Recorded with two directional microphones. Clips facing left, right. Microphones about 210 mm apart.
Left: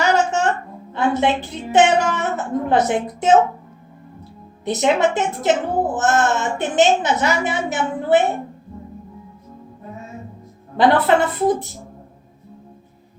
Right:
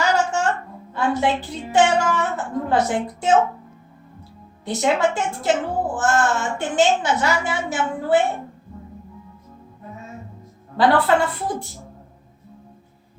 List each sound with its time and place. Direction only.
0.0 s a sound: 20° left (ahead or behind)
0.9 s a woman's voice: 20° left (ahead or behind)
4.6 s a woman's voice: 20° left (ahead or behind)
10.8 s a woman's voice: 20° left (ahead or behind)